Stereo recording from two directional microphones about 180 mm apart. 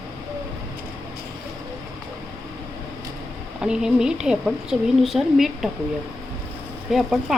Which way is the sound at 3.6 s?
5° right (ahead or behind).